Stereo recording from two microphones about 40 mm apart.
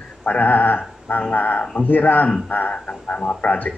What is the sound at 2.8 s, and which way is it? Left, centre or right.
Speech, left.